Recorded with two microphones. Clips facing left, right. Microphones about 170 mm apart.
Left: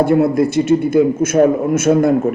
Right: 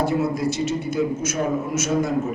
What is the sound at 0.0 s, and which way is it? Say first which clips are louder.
A man's voice: left 9 dB; 55° left (ahead or behind).